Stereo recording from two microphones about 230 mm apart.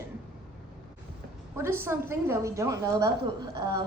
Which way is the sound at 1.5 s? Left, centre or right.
Centre.